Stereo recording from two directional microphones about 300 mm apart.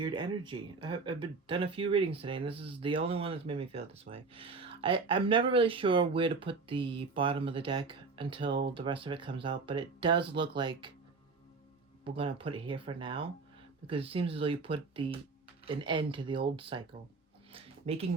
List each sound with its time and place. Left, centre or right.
0.0 s speech: centre
12.0 s speech: centre
17.5 s a sound: centre